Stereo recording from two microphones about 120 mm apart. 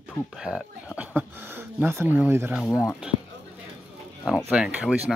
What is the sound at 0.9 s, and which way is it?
Speech, 15° right (ahead or behind).